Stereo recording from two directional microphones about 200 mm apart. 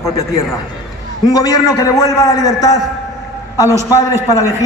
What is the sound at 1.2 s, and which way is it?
A man's voice, 20° left (ahead or behind).